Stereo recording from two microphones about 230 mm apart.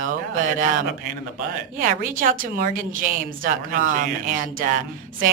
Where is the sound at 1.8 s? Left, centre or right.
Right.